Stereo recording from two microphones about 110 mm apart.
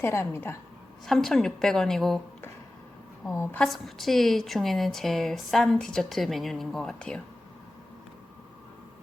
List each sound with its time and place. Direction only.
0.0 s a woman's voice: 25° left (ahead or behind)
1.0 s a woman's voice: 5° left (ahead or behind)
3.2 s a woman's voice: 20° left (ahead or behind)
3.6 s a woman's voice: centre (ahead or behind)